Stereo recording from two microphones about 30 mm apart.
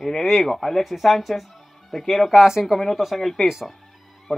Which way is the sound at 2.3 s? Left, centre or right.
Centre.